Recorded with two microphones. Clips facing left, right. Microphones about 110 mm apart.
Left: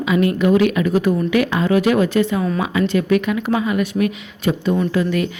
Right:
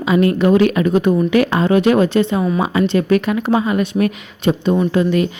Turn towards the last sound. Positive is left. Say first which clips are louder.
# right 3 dB
turn(degrees=-25)  # may be behind; listen again after turning